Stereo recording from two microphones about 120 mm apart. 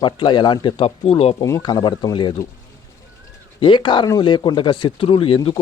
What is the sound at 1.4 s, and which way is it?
Speech, 30° left (ahead or behind).